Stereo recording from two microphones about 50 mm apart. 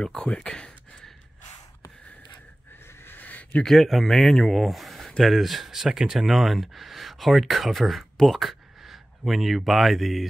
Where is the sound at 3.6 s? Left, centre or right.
Centre.